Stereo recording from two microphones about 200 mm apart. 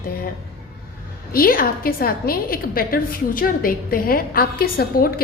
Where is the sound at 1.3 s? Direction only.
45° left (ahead or behind).